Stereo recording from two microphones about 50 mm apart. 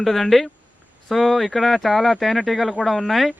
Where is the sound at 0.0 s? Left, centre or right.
Centre.